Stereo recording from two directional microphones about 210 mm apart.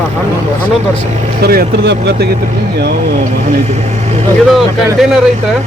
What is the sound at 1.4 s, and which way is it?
Speech, 50° right (ahead or behind).